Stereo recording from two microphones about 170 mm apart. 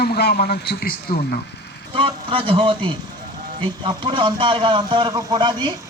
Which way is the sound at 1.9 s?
30° right (ahead or behind).